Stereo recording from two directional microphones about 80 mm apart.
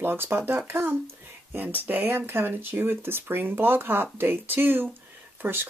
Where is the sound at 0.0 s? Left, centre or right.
Right.